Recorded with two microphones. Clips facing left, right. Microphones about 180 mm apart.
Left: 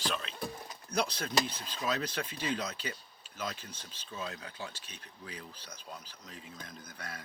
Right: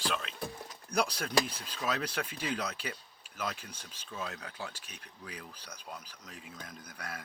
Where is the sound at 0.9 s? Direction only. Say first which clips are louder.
Right 2 dB; 25° left (ahead or behind).